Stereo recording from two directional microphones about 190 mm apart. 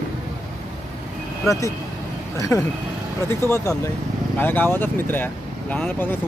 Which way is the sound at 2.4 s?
15° left (ahead or behind).